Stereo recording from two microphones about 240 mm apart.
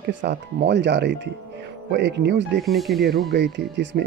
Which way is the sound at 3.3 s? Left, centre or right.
Right.